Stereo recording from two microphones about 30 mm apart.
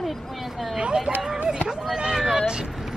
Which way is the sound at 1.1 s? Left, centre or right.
Right.